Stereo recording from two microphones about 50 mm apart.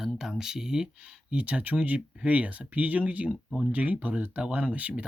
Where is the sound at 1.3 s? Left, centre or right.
Right.